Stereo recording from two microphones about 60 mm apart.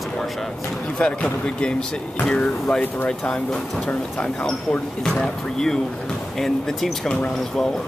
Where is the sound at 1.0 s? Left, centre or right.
Centre.